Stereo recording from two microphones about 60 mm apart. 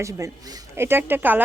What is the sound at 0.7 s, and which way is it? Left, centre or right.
Speech, right.